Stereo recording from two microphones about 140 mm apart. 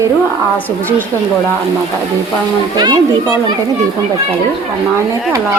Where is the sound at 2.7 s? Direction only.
30° right (ahead or behind).